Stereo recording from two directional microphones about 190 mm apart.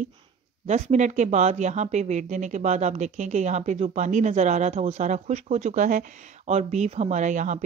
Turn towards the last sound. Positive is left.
turn(degrees=-40)  # may be behind; listen again after turning